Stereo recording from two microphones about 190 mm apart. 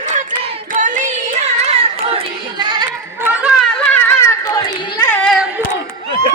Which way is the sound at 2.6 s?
25° right (ahead or behind).